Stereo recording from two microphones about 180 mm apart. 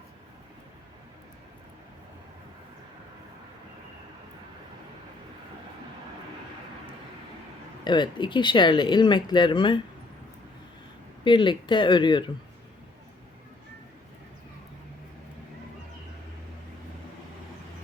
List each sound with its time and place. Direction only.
7.9 s speech: 25° left (ahead or behind)
11.2 s speech: 25° left (ahead or behind)